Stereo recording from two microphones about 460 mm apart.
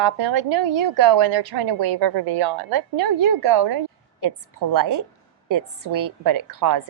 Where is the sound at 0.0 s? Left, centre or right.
Right.